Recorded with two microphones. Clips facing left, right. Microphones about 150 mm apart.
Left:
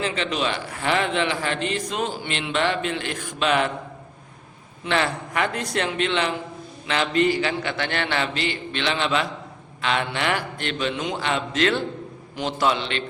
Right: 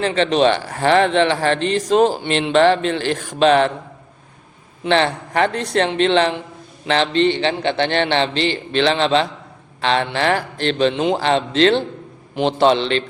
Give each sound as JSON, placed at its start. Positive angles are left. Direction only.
{"t": 0.0, "sound": "a man's voice", "side_deg": -35}
{"t": 4.9, "sound": "a man's voice", "side_deg": -30}